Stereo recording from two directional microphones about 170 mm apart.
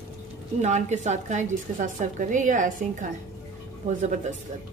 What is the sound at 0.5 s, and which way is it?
A woman's voice, 45° right (ahead or behind).